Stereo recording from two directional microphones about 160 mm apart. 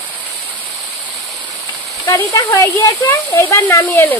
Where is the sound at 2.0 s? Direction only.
20° left (ahead or behind).